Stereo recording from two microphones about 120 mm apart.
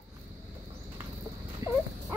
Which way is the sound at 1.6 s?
30° right (ahead or behind).